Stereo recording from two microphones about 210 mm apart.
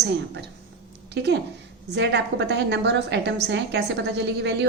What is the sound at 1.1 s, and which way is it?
A woman's voice, 55° right (ahead or behind).